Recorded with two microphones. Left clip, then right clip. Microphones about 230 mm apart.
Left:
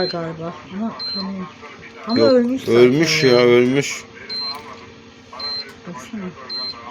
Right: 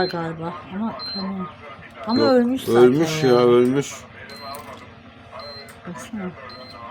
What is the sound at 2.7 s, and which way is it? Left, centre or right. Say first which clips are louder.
Speech: left 2 dB; centre.